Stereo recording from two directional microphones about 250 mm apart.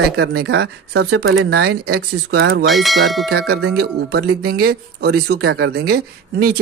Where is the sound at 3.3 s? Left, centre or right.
Right.